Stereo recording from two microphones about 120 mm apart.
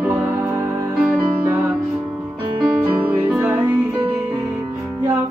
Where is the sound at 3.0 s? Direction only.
15° right (ahead or behind).